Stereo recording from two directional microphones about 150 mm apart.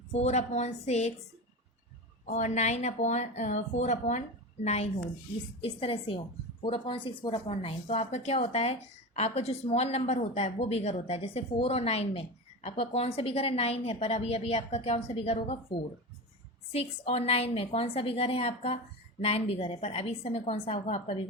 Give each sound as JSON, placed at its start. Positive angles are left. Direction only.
{"t": 0.1, "sound": "a woman's voice", "side_deg": 45}
{"t": 2.2, "sound": "a woman's voice", "side_deg": 50}
{"t": 16.7, "sound": "a woman's voice", "side_deg": 40}